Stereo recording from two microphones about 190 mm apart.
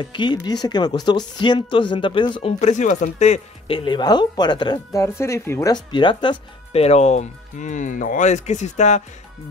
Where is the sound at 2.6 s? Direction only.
35° left (ahead or behind).